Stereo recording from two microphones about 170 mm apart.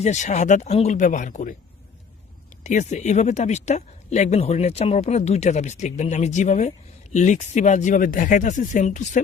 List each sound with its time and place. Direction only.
0.0 s speech: 45° left (ahead or behind)
2.6 s speech: 45° left (ahead or behind)